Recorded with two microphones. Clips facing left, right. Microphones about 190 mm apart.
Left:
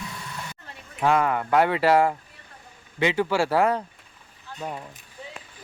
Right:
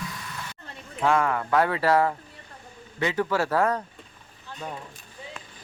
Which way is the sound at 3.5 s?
10° left (ahead or behind).